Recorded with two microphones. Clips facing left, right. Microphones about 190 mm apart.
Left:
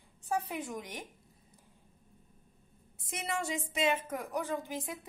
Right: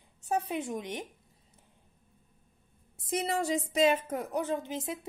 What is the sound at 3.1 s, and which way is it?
Speech, 35° right (ahead or behind).